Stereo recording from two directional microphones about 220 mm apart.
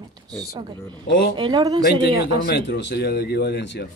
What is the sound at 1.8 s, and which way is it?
Speech, 45° left (ahead or behind).